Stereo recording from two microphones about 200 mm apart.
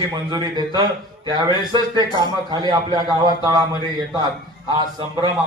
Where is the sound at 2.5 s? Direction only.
20° right (ahead or behind).